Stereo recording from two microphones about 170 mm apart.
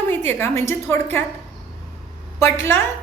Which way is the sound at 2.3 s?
15° left (ahead or behind).